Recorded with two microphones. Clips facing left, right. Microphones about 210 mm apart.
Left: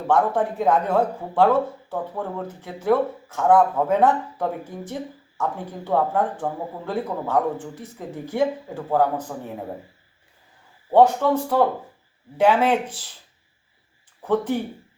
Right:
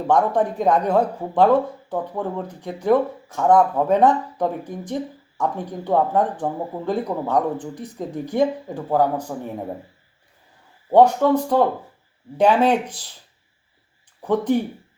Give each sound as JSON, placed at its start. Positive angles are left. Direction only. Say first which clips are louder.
{"t": 0.1, "sound": "speech", "louder": "right 1 dB", "side_deg": -15}
{"t": 10.9, "sound": "speech", "louder": "right 2 dB", "side_deg": -15}
{"t": 14.2, "sound": "speech", "louder": "right 3 dB", "side_deg": -15}